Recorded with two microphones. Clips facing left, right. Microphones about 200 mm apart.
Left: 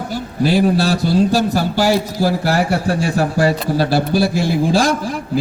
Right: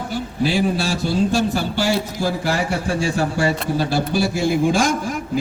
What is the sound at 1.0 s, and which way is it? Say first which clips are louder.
A man's voice: left 1 dB; 40° left (ahead or behind).